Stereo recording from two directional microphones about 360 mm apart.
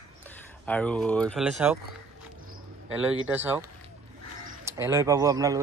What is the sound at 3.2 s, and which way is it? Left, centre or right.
Speech, centre.